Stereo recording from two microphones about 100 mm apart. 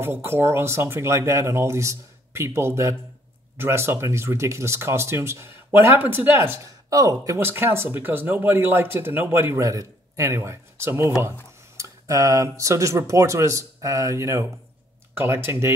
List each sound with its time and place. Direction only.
0.0 s speech: 25° right (ahead or behind)
6.9 s speech: 35° right (ahead or behind)
7.3 s speech: 25° right (ahead or behind)